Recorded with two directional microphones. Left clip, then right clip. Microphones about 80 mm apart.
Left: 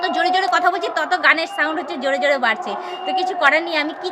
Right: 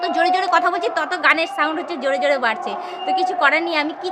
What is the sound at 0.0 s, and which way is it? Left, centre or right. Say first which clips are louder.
A woman's voice: even; right.